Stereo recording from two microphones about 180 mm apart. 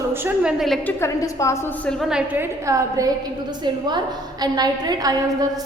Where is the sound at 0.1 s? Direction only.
10° right (ahead or behind).